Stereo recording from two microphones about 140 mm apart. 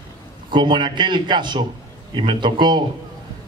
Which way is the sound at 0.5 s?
35° right (ahead or behind).